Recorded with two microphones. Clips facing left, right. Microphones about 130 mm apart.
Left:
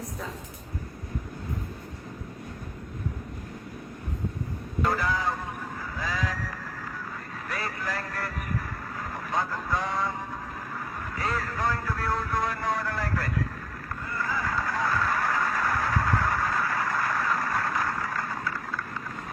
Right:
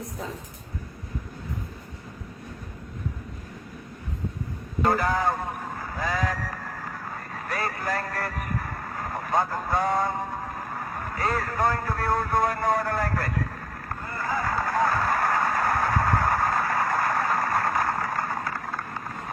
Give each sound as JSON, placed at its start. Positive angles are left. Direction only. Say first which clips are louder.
{"t": 4.8, "sound": "vehicle", "louder": "right 4 dB", "side_deg": -50}